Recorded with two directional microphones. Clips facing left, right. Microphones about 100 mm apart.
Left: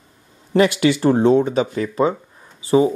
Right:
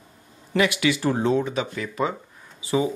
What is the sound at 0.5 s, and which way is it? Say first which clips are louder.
Speech: left 6 dB; 35° left (ahead or behind).